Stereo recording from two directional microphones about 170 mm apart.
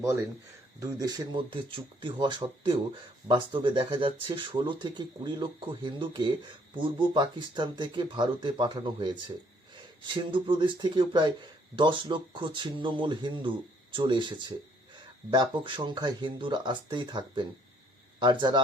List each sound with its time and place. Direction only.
0.0 s speech: 20° right (ahead or behind)